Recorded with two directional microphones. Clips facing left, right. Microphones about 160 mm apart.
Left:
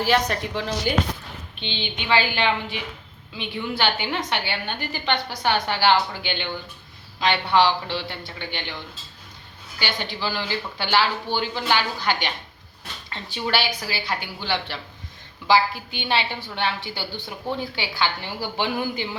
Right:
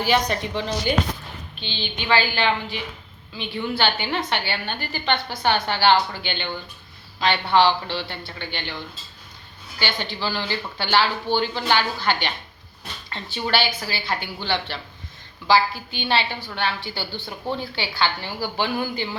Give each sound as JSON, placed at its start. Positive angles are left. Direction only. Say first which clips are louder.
{"t": 0.0, "sound": "a woman's voice", "louder": "even", "side_deg": 0}
{"t": 1.6, "sound": "a woman's voice", "louder": "right 1 dB", "side_deg": 20}
{"t": 9.7, "sound": "speech", "louder": "right 1 dB", "side_deg": 10}
{"t": 13.3, "sound": "a woman's voice", "louder": "right 1 dB", "side_deg": 10}